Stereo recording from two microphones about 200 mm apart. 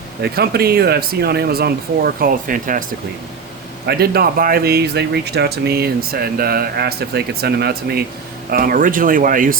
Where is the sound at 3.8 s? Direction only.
50° right (ahead or behind).